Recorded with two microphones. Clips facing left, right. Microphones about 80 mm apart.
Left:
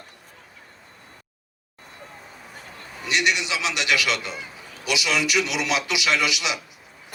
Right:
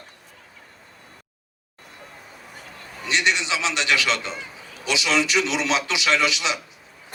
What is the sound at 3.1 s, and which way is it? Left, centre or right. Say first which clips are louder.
A man's voice: right 1 dB; right.